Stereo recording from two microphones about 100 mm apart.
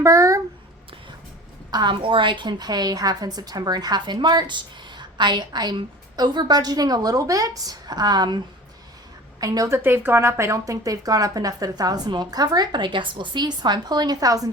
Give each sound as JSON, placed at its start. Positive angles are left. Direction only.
{"t": 0.0, "sound": "a sound", "side_deg": -30}
{"t": 1.7, "sound": "a woman's voice", "side_deg": -50}
{"t": 9.4, "sound": "speech", "side_deg": -35}